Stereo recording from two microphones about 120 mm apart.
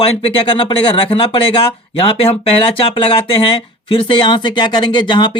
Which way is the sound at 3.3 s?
50° left (ahead or behind).